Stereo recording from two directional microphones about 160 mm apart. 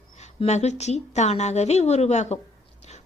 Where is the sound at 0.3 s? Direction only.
45° left (ahead or behind).